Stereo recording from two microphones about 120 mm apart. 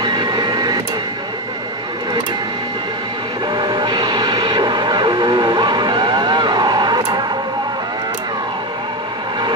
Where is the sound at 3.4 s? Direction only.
35° right (ahead or behind).